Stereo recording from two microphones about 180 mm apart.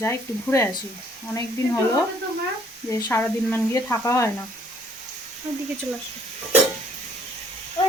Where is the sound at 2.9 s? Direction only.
10° left (ahead or behind).